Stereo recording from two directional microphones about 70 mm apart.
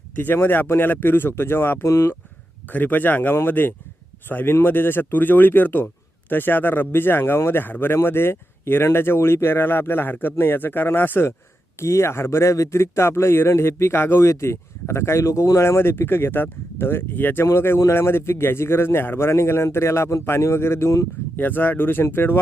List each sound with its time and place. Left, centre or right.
0.2 s speech: left
1.9 s speech: left
2.6 s speech: left
21.3 s speech: left